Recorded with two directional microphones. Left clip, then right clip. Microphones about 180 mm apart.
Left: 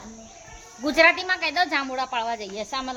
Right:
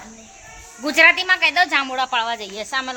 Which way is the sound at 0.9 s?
Centre (ahead or behind).